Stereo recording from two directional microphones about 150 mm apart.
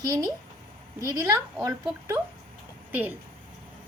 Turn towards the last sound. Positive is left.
turn(degrees=-10)  # may be behind; listen again after turning